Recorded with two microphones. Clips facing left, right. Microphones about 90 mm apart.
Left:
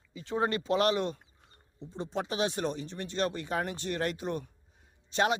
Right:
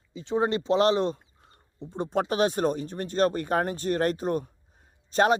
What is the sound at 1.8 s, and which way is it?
Speech, 55° right (ahead or behind).